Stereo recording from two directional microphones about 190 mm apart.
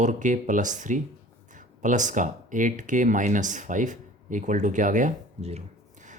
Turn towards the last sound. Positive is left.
turn(degrees=-40)  # may be behind; listen again after turning